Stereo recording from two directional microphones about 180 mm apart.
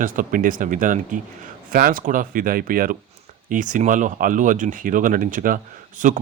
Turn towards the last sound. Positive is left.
turn(degrees=-45)  # may be behind; listen again after turning